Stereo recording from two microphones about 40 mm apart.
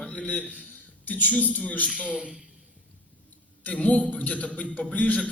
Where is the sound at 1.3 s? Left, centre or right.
Left.